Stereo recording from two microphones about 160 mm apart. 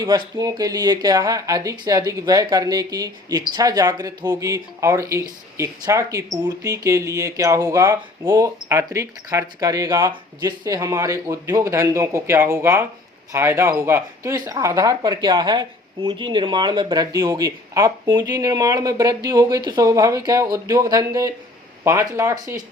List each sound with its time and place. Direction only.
0.0 s speech: 25° right (ahead or behind)